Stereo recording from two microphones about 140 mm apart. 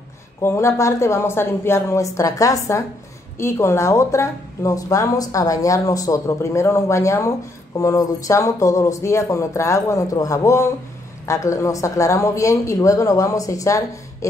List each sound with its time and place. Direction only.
0.4 s speech: 20° left (ahead or behind)